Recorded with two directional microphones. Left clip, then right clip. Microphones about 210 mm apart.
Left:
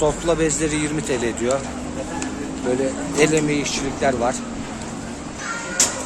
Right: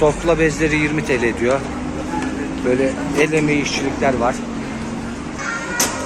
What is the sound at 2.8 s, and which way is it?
Speech, 10° left (ahead or behind).